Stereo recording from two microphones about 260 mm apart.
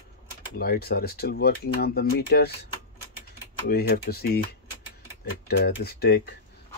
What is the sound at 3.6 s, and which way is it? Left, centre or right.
Speech, left.